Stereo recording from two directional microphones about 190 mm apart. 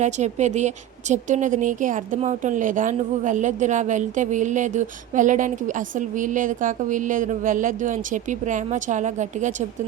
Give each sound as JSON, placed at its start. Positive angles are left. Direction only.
{"t": 0.0, "sound": "a woman's voice", "side_deg": -40}